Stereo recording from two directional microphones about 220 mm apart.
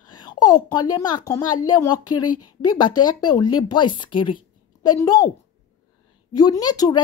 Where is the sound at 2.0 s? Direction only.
90° left.